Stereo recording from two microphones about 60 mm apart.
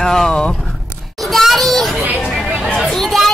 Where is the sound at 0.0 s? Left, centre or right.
Centre.